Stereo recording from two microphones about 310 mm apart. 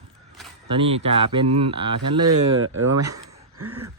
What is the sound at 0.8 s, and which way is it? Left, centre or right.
Speech, centre.